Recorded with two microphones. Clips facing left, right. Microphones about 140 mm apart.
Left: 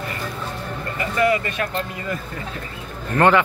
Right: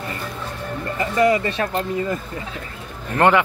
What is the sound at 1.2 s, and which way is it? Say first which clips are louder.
Speech: right 2 dB; 15° right (ahead or behind).